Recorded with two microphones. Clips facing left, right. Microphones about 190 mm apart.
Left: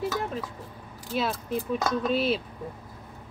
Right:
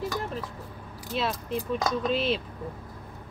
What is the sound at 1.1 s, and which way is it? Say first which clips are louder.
Speech: left 1 dB; 5° left (ahead or behind).